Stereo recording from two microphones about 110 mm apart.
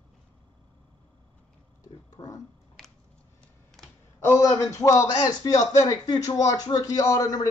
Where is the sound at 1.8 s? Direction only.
30° left (ahead or behind).